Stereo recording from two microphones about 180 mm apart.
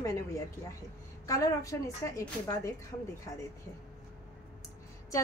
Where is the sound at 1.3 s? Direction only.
20° left (ahead or behind).